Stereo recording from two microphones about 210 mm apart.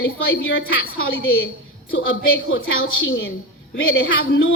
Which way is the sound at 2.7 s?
70° left (ahead or behind).